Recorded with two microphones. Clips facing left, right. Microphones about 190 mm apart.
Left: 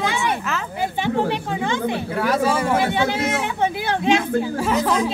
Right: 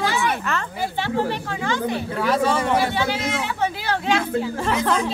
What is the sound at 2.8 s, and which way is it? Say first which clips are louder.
Speech: left 2 dB; 20° left (ahead or behind).